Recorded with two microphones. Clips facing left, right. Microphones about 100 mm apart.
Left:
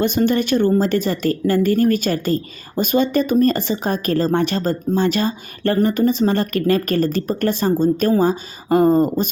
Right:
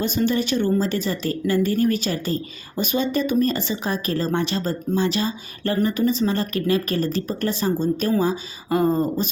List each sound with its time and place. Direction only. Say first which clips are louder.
0.0 s speech: left 4 dB; 55° left (ahead or behind)